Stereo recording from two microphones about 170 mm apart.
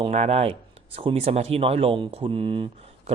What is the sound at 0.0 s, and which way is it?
Speech, 40° right (ahead or behind).